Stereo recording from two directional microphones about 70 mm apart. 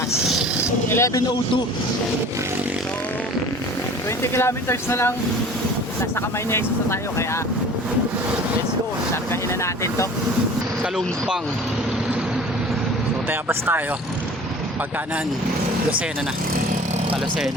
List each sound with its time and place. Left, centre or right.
0.9 s speech: left
4.2 s speech: left
13.5 s speech: right